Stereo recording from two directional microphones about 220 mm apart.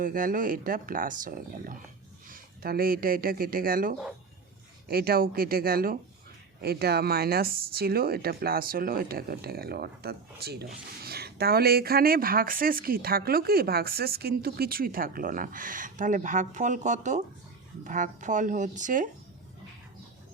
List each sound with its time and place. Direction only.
0.0 s speech: 40° right (ahead or behind)